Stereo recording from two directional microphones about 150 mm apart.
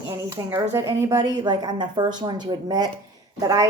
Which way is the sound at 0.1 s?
20° right (ahead or behind).